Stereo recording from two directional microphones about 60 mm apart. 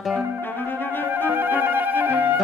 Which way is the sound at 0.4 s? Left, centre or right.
Left.